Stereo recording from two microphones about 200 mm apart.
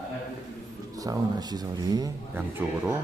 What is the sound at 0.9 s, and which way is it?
Speech, 15° right (ahead or behind).